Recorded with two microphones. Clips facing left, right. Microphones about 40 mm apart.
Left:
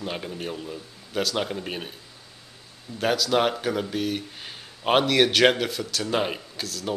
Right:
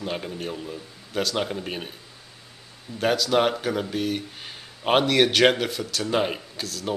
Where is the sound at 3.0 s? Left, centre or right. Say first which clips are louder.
Right 1 dB; centre.